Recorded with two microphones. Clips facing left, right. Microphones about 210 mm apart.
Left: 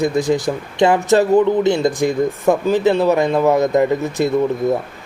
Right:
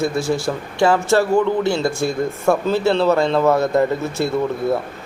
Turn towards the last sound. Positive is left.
turn(degrees=15)  # may be behind; listen again after turning